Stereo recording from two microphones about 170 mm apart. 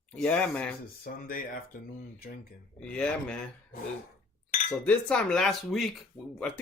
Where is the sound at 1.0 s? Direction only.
55° left (ahead or behind).